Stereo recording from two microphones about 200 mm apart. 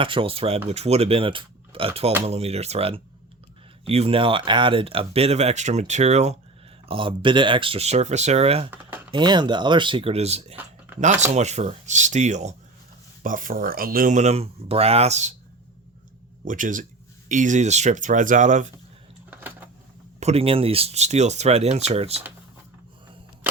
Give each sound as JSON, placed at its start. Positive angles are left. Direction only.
{"t": 0.0, "sound": "speech", "side_deg": -25}
{"t": 10.5, "sound": "a sound", "side_deg": -10}
{"t": 11.3, "sound": "speech", "side_deg": -35}
{"t": 16.4, "sound": "speech", "side_deg": -40}
{"t": 19.3, "sound": "a sound", "side_deg": -10}
{"t": 20.1, "sound": "speech", "side_deg": -30}